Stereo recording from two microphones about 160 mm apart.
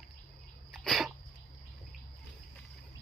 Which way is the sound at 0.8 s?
Centre (ahead or behind).